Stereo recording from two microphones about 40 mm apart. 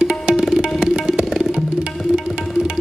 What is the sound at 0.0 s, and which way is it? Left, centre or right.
Tabla, centre.